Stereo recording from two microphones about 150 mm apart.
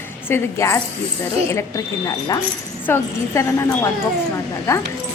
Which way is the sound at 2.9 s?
20° left (ahead or behind).